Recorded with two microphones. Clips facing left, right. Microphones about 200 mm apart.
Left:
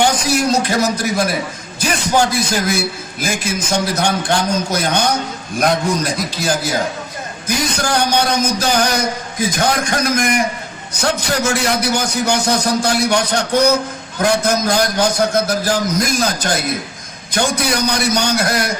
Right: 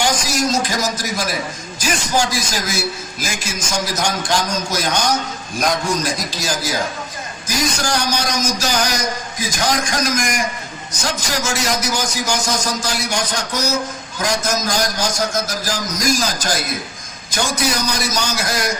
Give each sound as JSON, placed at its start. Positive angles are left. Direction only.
{"t": 0.0, "sound": "a man's voice", "side_deg": 60}